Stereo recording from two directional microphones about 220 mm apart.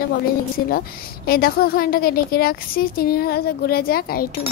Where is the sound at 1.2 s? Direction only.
45° left (ahead or behind).